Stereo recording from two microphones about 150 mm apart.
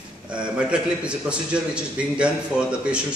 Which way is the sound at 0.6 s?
5° right (ahead or behind).